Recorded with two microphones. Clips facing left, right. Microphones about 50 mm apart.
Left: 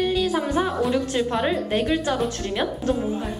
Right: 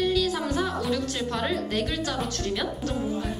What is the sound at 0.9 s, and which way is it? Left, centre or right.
A woman's voice, left.